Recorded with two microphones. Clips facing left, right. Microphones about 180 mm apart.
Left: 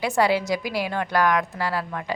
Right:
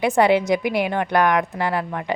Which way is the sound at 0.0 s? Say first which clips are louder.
Right 5 dB; 20° right (ahead or behind).